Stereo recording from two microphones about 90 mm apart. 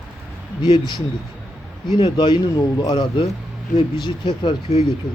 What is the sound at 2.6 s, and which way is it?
Speech, 50° left (ahead or behind).